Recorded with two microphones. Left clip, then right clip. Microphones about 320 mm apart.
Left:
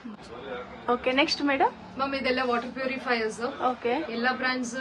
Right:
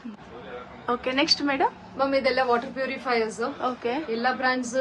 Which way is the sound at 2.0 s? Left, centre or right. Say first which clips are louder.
Right 5 dB; centre.